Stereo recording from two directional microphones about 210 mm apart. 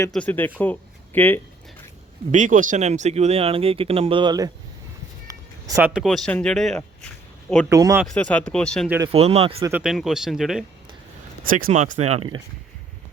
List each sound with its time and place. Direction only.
0.1 s speech: 5° left (ahead or behind)
2.3 s speech: 40° right (ahead or behind); by 6.8 s centre (ahead or behind)
7.7 s speech: 15° right (ahead or behind)
8.0 s speech: 5° left (ahead or behind)
9.1 s speech: 30° right (ahead or behind)
9.6 s speech: 15° right (ahead or behind)
9.8 s speech: centre (ahead or behind)
11.4 s speech: 40° right (ahead or behind)